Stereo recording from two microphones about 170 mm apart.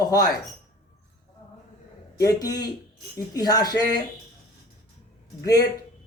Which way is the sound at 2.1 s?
20° left (ahead or behind).